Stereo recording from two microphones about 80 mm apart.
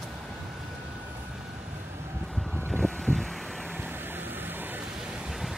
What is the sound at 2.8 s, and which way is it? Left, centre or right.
Vehicle, centre.